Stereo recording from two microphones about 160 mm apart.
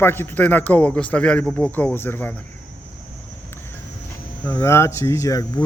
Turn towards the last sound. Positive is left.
turn(degrees=20)  # may be behind; listen again after turning